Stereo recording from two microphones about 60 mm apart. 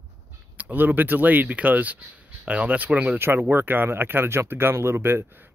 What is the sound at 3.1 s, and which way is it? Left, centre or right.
Speech, right.